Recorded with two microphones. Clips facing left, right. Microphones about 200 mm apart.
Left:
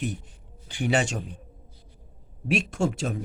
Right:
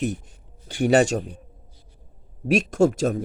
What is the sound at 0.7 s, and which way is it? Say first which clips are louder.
Speech: right 7 dB; 40° right (ahead or behind).